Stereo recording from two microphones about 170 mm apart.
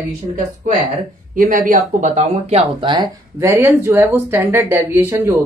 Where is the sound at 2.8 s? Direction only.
25° right (ahead or behind).